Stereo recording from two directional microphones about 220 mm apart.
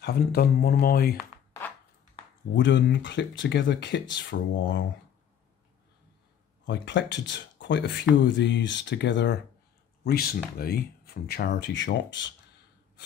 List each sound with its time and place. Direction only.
0.0 s speech: 45° left (ahead or behind)
2.5 s speech: 55° left (ahead or behind)
6.6 s speech: 50° left (ahead or behind)